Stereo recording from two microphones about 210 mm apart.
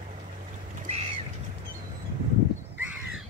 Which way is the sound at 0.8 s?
30° right (ahead or behind).